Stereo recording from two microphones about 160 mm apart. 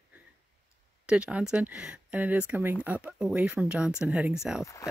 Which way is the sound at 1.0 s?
5° right (ahead or behind).